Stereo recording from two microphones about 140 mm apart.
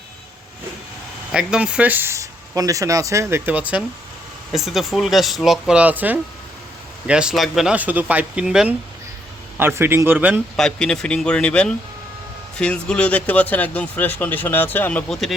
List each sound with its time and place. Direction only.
1.3 s speech: 5° right (ahead or behind)
9.6 s speech: 15° right (ahead or behind)
10.6 s speech: 5° left (ahead or behind)